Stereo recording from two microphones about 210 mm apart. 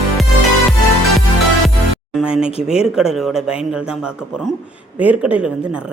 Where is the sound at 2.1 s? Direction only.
5° right (ahead or behind).